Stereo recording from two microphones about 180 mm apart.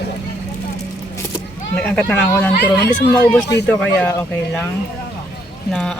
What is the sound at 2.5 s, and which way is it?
Speech, 65° left (ahead or behind).